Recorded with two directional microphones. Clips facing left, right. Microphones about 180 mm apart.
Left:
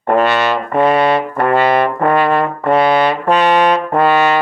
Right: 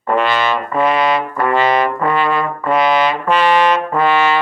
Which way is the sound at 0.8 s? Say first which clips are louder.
Left 3 dB; 30° left (ahead or behind).